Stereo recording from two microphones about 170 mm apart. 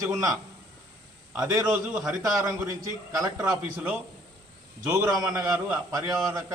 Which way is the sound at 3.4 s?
5° right (ahead or behind).